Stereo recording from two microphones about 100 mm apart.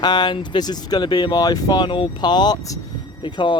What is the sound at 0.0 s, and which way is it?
Speech, 45° left (ahead or behind).